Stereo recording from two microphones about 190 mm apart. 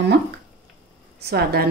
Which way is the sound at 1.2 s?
55° right (ahead or behind).